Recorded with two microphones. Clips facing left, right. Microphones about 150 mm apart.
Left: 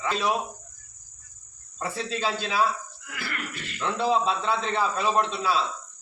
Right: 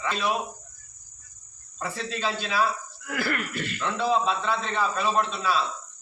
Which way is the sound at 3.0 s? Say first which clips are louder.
Right 12 dB; 50° right (ahead or behind).